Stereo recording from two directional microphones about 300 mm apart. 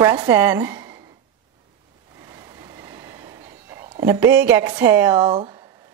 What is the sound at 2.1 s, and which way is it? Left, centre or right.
Vehicle, centre.